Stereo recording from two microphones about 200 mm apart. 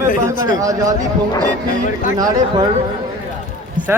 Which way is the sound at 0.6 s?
15° right (ahead or behind).